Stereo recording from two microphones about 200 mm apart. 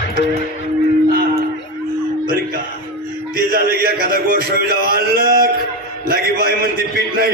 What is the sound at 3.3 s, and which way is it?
A man's voice, 45° right (ahead or behind).